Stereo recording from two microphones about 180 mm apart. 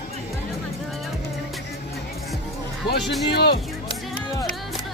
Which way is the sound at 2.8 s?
70° left (ahead or behind).